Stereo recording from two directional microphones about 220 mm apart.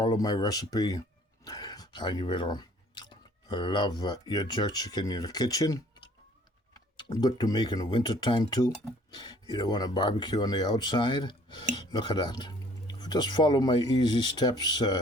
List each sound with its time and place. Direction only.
0.0 s speech: 20° left (ahead or behind)
7.1 s speech: 15° left (ahead or behind)